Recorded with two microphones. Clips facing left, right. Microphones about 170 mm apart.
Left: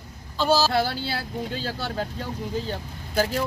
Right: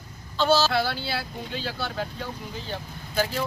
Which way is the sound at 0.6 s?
40° left (ahead or behind).